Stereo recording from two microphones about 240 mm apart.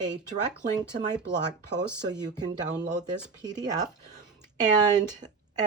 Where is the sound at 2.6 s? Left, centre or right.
Right.